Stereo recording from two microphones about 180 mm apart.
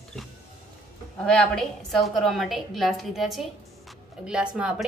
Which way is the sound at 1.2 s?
5° left (ahead or behind).